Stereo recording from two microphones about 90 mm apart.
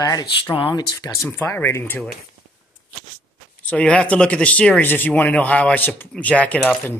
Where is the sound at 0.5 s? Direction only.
65° left (ahead or behind).